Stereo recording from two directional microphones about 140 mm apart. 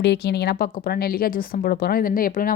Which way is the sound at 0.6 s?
90° left.